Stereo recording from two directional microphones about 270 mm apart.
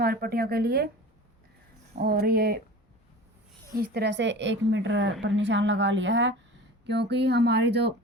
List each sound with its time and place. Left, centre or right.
0.0 s a woman's voice: right
2.0 s a woman's voice: right
3.8 s a woman's voice: right